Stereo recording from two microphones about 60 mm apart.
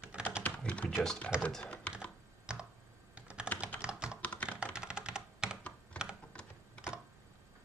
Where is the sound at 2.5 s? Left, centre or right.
Centre.